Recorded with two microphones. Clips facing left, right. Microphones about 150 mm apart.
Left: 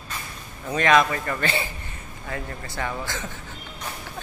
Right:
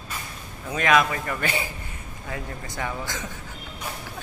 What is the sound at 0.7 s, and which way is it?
A man's voice, 5° right (ahead or behind).